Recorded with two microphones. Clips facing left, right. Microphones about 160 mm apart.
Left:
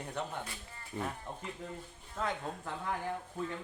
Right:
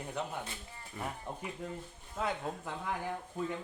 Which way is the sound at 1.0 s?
25° left (ahead or behind).